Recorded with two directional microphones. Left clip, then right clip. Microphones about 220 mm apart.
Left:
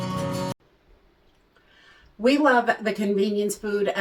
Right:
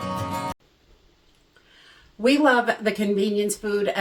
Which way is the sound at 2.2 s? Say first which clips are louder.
Right 1 dB; 15° right (ahead or behind).